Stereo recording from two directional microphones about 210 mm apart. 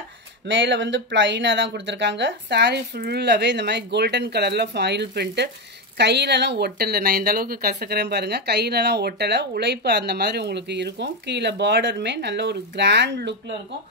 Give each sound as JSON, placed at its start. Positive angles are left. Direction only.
{"t": 0.5, "sound": "speech", "side_deg": -60}